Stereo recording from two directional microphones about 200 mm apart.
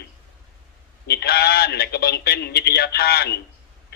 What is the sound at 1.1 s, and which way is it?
A man's voice, 50° left (ahead or behind).